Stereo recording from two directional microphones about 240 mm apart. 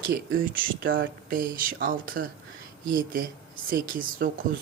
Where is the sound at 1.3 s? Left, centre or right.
Right.